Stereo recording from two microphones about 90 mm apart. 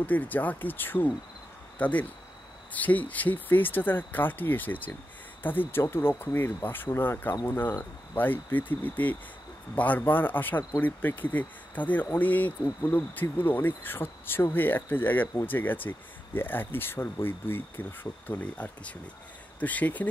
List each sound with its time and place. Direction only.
0.0 s speech: 20° left (ahead or behind)